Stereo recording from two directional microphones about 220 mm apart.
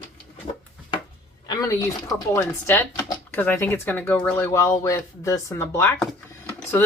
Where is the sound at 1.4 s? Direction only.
15° left (ahead or behind).